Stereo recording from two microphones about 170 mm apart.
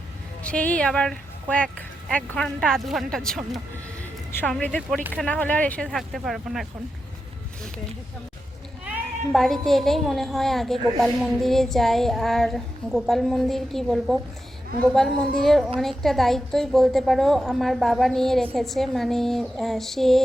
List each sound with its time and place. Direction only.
0.4 s a woman's voice: 10° left (ahead or behind)
4.3 s a woman's voice: 15° left (ahead or behind)
9.3 s a woman's voice: centre (ahead or behind)